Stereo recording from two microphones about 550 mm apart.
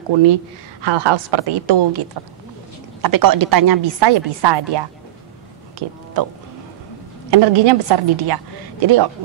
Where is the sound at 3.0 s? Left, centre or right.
Right.